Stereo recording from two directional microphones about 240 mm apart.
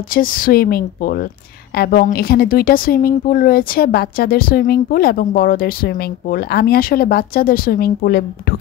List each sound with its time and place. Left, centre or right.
0.1 s speech: left